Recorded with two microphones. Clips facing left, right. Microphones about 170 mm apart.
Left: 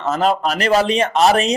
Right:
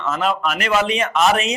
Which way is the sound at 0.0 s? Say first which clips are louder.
Left 3 dB; 40° left (ahead or behind).